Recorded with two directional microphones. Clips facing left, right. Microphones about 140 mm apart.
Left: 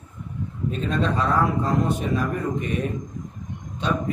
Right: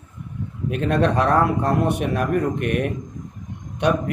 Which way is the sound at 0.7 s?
70° right (ahead or behind).